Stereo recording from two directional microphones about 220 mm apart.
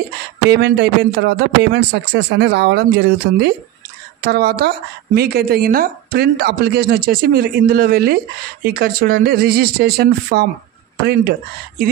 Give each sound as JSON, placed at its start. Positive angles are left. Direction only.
{"t": 0.5, "sound": "a woman's voice", "side_deg": -50}